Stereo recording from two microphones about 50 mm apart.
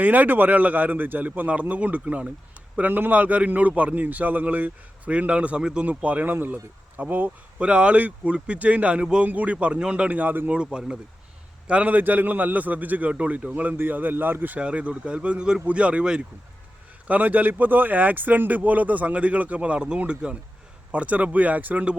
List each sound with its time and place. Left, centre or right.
0.0 s a man's voice: right; by 5.8 s centre
5.8 s speech: right
6.3 s a man's voice: right
7.6 s speech: right
10.5 s speech: centre
11.7 s a man's voice: right
14.6 s speech: right
17.1 s a man's voice: right